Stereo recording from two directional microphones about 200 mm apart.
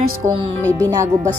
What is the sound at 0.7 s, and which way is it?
Speech, 15° right (ahead or behind).